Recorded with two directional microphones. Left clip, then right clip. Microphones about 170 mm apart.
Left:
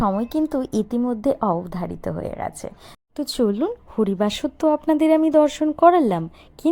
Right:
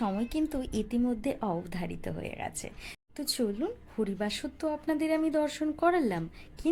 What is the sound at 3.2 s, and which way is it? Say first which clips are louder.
Speech: left 10 dB; 30° left (ahead or behind).